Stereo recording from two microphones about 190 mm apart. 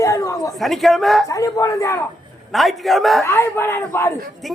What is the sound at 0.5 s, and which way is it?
Speech, centre (ahead or behind).